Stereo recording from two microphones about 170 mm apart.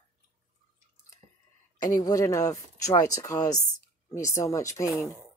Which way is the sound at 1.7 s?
25° left (ahead or behind).